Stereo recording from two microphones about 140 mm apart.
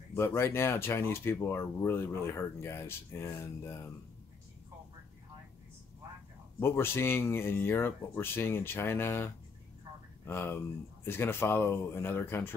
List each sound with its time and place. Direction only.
0.1 s speech: 15° left (ahead or behind)
6.6 s speech: 15° left (ahead or behind)